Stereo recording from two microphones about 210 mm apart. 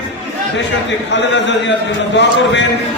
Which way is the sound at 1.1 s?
60° left (ahead or behind).